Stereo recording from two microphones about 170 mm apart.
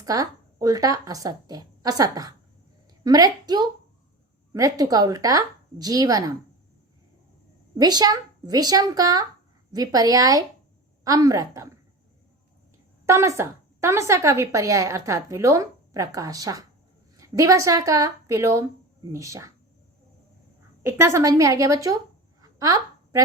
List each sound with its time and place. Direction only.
0.0 s speech: 20° right (ahead or behind)
7.8 s speech: 25° right (ahead or behind)
13.1 s speech: 15° right (ahead or behind)
20.8 s speech: 15° right (ahead or behind)
22.4 s a sound: 20° right (ahead or behind)